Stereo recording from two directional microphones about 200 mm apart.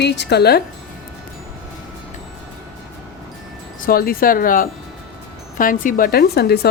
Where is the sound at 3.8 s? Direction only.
45° left (ahead or behind).